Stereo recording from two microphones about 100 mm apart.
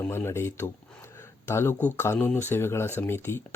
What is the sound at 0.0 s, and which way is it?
Speech, 20° left (ahead or behind).